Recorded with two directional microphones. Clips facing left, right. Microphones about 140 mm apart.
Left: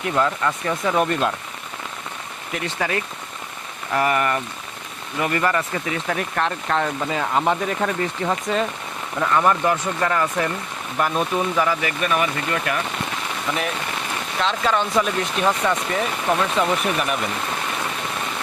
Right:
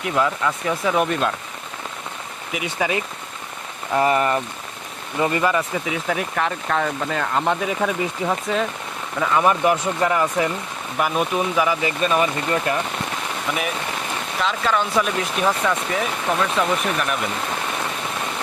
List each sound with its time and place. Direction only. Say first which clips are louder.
0.0 s speech: even; 5° right (ahead or behind)
2.5 s speech: right 1 dB; 10° right (ahead or behind)
3.9 s speech: right 2 dB; 25° right (ahead or behind); by 9.4 s 5° right (ahead or behind)
9.4 s speech: right 3 dB; 15° right (ahead or behind)
11.8 s speech: right 2 dB; 25° right (ahead or behind)
14.4 s speech: even; centre (ahead or behind)